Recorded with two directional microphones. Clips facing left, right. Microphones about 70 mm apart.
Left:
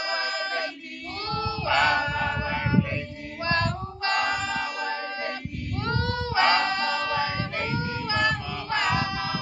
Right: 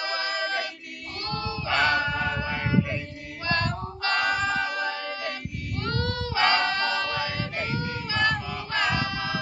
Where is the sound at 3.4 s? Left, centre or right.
Left.